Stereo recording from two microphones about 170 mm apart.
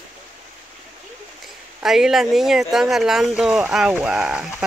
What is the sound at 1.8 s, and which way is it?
Speech, centre (ahead or behind).